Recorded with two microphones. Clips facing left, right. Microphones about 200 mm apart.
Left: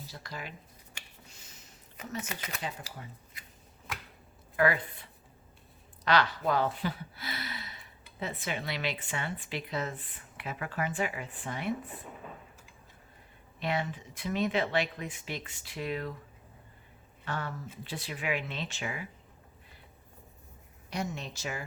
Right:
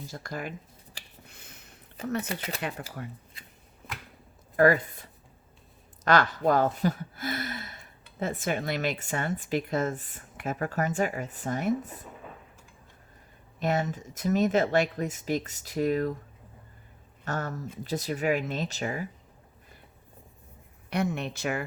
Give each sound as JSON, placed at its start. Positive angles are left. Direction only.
{"t": 0.0, "sound": "speech", "side_deg": -50}
{"t": 1.0, "sound": "a sound", "side_deg": -35}
{"t": 1.3, "sound": "a sound", "side_deg": -60}
{"t": 2.0, "sound": "speech", "side_deg": -30}
{"t": 2.6, "sound": "speech", "side_deg": -60}
{"t": 4.5, "sound": "speech", "side_deg": -45}
{"t": 6.1, "sound": "speech", "side_deg": -50}
{"t": 13.6, "sound": "speech", "side_deg": -45}
{"t": 17.2, "sound": "speech", "side_deg": -45}
{"t": 20.9, "sound": "speech", "side_deg": -60}